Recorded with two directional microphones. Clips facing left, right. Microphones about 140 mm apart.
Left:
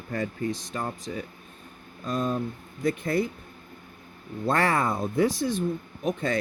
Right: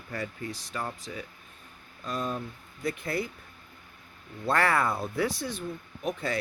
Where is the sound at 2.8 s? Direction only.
45° left (ahead or behind).